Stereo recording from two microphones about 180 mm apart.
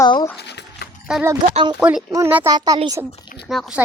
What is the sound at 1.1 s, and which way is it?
Speech, 5° right (ahead or behind).